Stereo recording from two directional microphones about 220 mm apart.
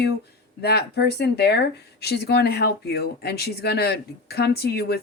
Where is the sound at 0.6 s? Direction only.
45° left (ahead or behind).